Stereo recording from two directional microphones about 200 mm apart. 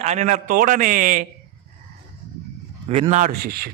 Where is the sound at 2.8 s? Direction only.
30° right (ahead or behind).